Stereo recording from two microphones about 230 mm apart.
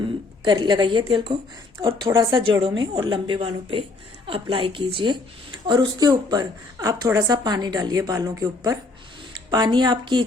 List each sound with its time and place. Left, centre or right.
0.4 s a woman's voice: right